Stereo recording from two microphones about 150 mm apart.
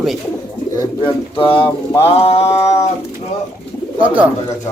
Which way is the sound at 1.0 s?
35° left (ahead or behind).